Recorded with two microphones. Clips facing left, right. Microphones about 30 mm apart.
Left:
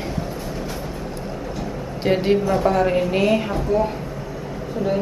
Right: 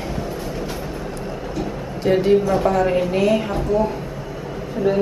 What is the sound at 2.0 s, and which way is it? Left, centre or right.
Speech, left.